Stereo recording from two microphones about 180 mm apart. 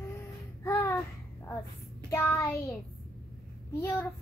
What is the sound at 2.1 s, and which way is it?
Child singing, 15° left (ahead or behind).